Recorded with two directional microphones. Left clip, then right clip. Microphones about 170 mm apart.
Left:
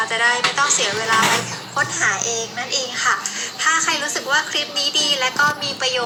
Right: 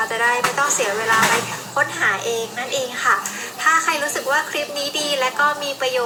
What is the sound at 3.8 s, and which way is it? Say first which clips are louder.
A woman's voice: right 1 dB; 25° right (ahead or behind).